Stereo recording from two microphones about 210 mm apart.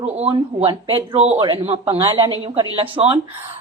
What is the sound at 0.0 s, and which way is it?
A woman's voice, 30° right (ahead or behind).